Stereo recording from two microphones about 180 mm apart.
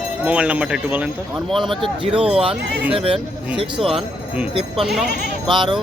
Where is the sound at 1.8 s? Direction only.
30° right (ahead or behind).